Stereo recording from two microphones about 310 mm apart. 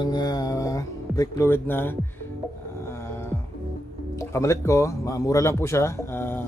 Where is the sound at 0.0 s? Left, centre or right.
Centre.